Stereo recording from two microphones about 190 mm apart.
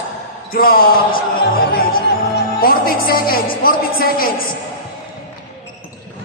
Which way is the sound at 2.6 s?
50° left (ahead or behind).